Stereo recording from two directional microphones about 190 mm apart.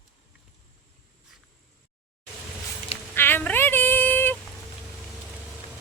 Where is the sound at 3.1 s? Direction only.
10° left (ahead or behind).